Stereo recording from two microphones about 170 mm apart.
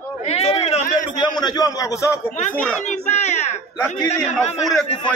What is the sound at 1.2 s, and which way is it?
Speech, 25° left (ahead or behind).